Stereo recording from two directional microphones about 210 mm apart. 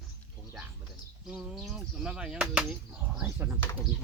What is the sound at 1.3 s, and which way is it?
Speech, centre (ahead or behind).